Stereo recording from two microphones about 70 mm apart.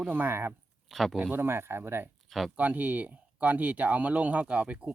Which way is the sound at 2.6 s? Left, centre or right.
Right.